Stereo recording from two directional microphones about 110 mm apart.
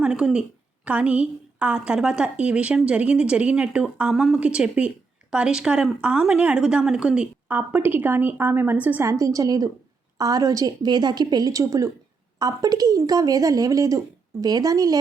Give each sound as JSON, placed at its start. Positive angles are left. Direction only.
{"t": 0.0, "sound": "a woman's voice", "side_deg": -5}
{"t": 9.0, "sound": "a woman's voice", "side_deg": -30}